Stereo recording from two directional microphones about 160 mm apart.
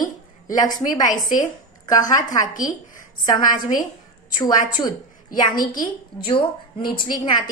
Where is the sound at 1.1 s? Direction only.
55° left (ahead or behind).